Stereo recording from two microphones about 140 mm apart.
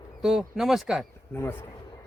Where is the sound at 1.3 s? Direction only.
15° left (ahead or behind).